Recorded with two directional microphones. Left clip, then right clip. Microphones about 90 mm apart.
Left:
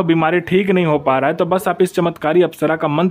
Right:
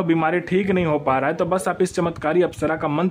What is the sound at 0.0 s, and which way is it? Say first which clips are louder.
A man's voice: left 5 dB; 40° left (ahead or behind).